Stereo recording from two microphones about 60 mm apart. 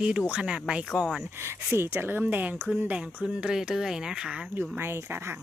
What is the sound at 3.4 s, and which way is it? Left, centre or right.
Speech, centre.